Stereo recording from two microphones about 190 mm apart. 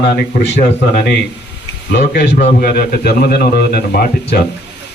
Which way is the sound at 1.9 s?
60° left (ahead or behind).